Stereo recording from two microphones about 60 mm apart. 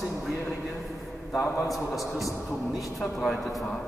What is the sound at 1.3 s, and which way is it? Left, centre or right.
Speech, left.